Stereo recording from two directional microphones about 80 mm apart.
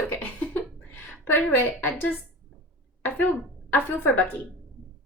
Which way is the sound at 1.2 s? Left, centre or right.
Left.